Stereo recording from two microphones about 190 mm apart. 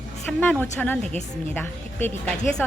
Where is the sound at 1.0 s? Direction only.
35° right (ahead or behind).